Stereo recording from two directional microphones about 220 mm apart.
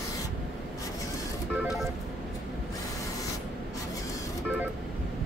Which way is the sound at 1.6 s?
Centre (ahead or behind).